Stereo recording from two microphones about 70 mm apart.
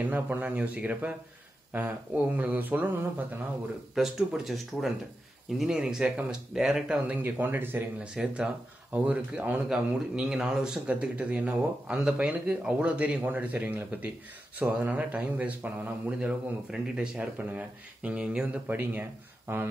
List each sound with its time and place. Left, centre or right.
0.0 s a man's voice: right
3.9 s speech: centre
7.1 s a man's voice: right
8.0 s a man's voice: centre
9.7 s a man's voice: centre
18.7 s speech: right